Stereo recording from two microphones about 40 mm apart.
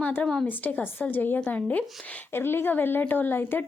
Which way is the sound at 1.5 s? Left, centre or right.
Left.